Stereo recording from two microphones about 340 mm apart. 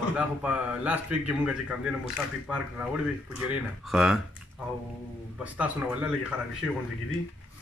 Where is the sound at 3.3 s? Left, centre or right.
Centre.